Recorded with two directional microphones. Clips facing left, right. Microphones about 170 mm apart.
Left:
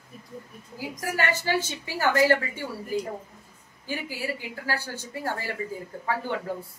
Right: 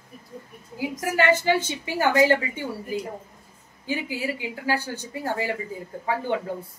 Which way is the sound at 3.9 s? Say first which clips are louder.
Right 4 dB; 15° right (ahead or behind).